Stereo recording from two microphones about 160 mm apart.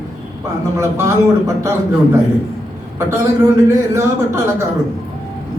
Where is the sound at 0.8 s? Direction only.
15° right (ahead or behind).